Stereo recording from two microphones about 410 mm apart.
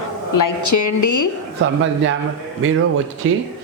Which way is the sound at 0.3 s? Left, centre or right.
Left.